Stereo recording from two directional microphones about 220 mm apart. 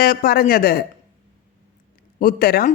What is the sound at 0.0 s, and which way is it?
Speech, 40° left (ahead or behind).